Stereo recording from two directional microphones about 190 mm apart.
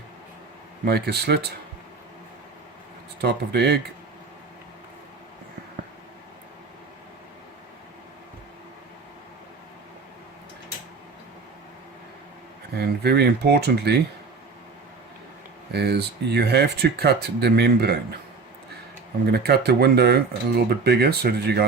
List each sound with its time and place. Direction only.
0.9 s speech: 55° right (ahead or behind)
3.2 s speech: 60° right (ahead or behind)
12.7 s speech: 55° right (ahead or behind)
15.7 s speech: 60° right (ahead or behind)
19.2 s speech: 55° right (ahead or behind)